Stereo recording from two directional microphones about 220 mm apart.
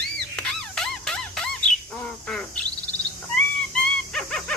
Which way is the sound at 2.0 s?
5° left (ahead or behind).